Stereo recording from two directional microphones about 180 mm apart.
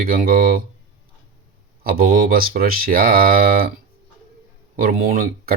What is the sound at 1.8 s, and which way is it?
Speech, 55° right (ahead or behind).